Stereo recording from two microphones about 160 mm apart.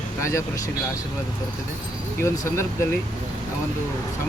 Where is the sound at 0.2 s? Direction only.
20° left (ahead or behind).